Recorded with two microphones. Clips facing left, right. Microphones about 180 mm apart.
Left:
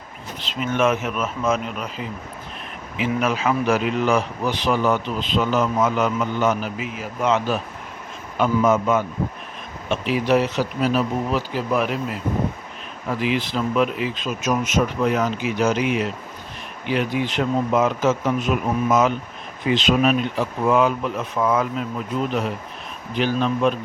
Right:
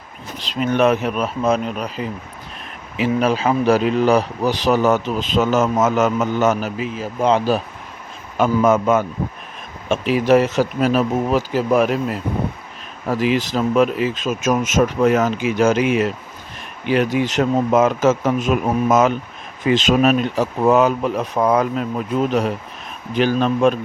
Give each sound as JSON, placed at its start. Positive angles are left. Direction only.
{"t": 0.4, "sound": "speech", "side_deg": -35}
{"t": 3.0, "sound": "speech", "side_deg": -30}
{"t": 8.4, "sound": "speech", "side_deg": -50}
{"t": 17.2, "sound": "speech", "side_deg": -45}